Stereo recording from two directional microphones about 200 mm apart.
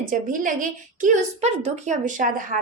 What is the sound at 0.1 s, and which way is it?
A woman's voice, 40° right (ahead or behind).